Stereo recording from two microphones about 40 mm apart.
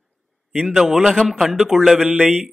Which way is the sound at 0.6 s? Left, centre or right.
Centre.